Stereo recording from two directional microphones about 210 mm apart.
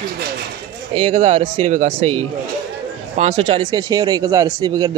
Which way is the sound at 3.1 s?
30° right (ahead or behind).